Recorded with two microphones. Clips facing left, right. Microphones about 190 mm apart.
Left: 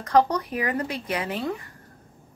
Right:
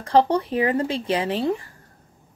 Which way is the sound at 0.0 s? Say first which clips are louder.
Right 2 dB; 30° right (ahead or behind).